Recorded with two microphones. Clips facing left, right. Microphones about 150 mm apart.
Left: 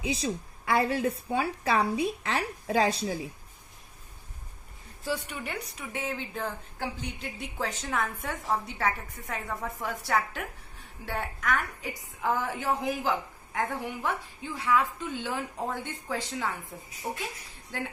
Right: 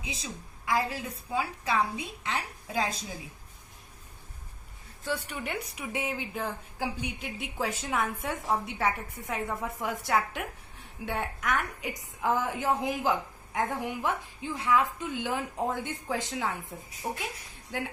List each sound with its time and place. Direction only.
0.0 s a woman's voice: 70° left (ahead or behind)
5.3 s a woman's voice: centre (ahead or behind)
5.7 s a woman's voice: 15° right (ahead or behind)
12.2 s a woman's voice: 20° right (ahead or behind)